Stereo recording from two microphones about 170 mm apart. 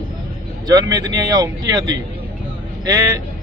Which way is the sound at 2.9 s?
20° right (ahead or behind).